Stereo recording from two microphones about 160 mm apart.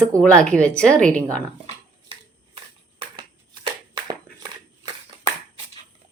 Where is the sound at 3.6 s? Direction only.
30° right (ahead or behind).